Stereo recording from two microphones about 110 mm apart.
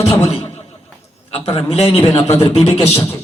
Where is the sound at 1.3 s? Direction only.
60° left (ahead or behind).